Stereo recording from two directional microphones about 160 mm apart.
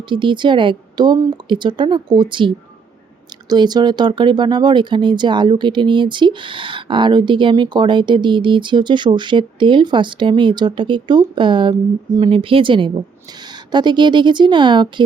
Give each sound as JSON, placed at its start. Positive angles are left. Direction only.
{"t": 0.1, "sound": "speech", "side_deg": -30}
{"t": 3.5, "sound": "speech", "side_deg": -25}